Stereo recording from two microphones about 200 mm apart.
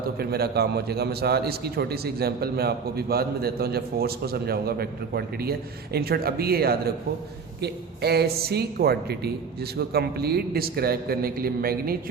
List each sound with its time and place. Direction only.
0.0 s a man's voice: 50° right (ahead or behind)